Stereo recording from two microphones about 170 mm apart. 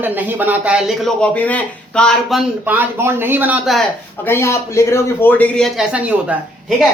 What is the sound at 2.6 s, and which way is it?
A man's voice, 10° right (ahead or behind).